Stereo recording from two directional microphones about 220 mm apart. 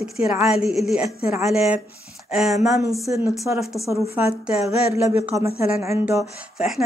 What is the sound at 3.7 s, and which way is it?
Speech, 15° left (ahead or behind).